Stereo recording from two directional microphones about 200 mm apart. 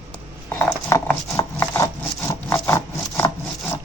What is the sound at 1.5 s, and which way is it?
Wood, 15° left (ahead or behind).